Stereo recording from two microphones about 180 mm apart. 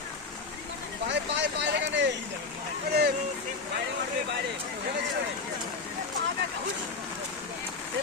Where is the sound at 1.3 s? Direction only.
75° right (ahead or behind).